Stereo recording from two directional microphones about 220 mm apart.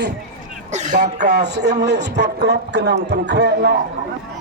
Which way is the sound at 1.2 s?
50° right (ahead or behind).